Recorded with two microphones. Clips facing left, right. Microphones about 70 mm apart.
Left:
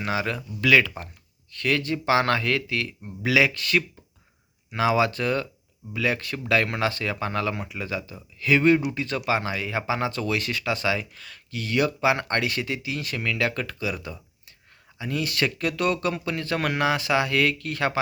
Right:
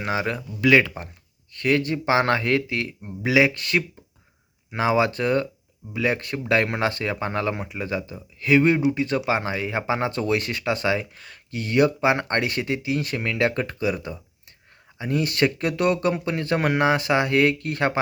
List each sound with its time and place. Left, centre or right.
0.0 s speech: right